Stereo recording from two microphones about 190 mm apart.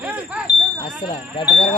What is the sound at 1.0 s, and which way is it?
Speech, 25° left (ahead or behind).